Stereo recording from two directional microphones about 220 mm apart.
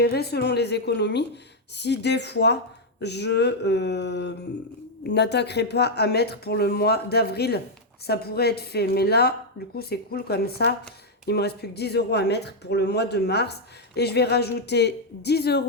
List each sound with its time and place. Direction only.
0.0 s speech: 45° left (ahead or behind)